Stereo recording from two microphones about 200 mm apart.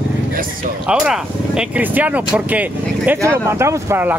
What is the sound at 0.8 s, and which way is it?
Speech, 5° right (ahead or behind).